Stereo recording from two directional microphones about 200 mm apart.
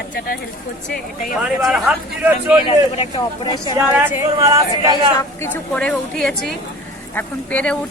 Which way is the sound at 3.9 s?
15° right (ahead or behind).